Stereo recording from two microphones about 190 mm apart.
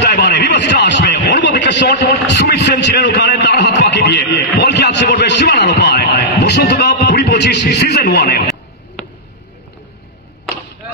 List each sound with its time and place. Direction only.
0.0 s radio: 60° left (ahead or behind)